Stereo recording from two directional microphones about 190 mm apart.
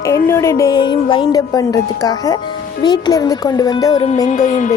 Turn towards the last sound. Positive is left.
turn(degrees=40)  # may be behind; listen again after turning